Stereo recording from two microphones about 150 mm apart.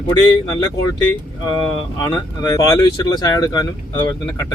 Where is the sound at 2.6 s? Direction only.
25° left (ahead or behind).